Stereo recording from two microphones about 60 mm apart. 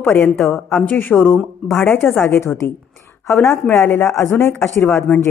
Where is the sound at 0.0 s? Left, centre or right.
Left.